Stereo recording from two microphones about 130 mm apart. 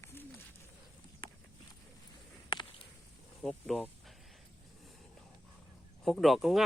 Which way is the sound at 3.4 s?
Centre (ahead or behind).